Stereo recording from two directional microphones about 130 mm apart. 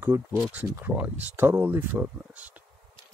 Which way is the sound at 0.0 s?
20° right (ahead or behind).